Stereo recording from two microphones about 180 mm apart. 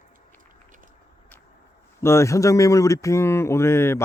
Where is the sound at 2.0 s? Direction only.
15° left (ahead or behind).